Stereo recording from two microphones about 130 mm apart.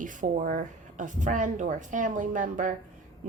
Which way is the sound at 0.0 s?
85° right.